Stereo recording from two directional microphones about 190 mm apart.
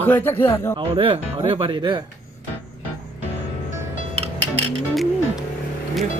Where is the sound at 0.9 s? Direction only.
25° right (ahead or behind).